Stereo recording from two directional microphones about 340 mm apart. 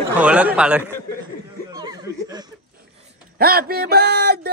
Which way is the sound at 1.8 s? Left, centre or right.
Centre.